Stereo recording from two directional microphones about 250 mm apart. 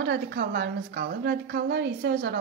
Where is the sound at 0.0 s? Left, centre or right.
Right.